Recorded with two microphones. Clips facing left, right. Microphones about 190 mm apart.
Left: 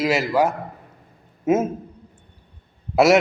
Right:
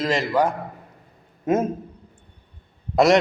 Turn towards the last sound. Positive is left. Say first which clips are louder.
# left 1 dB
turn(degrees=5)  # may be behind; listen again after turning